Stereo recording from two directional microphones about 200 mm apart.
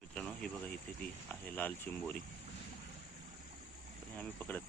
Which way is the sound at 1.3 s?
10° left (ahead or behind).